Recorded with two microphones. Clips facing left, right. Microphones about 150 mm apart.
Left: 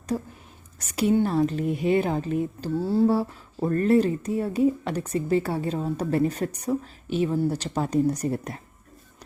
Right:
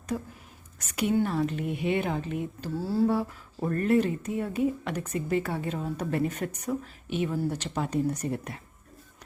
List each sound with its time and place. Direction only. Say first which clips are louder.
0.1 s speech: left 4 dB; 35° left (ahead or behind)
2.7 s speech: left 4 dB; 25° left (ahead or behind)